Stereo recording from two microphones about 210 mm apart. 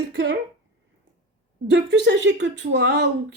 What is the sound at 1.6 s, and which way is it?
Speech, 55° right (ahead or behind).